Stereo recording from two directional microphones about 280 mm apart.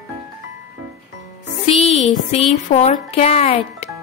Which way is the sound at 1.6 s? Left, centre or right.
Left.